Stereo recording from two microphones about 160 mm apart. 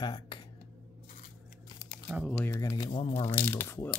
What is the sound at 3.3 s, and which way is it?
Speech, 15° left (ahead or behind).